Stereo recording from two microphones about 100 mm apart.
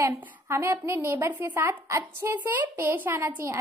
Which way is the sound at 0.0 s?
25° right (ahead or behind).